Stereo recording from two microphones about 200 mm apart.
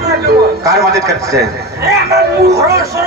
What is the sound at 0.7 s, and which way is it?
Speech, 15° right (ahead or behind).